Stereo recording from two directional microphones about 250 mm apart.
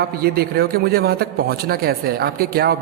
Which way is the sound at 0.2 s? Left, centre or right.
Right.